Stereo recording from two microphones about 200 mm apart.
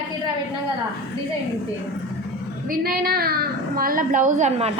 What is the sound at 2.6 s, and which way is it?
A woman's voice, 45° right (ahead or behind).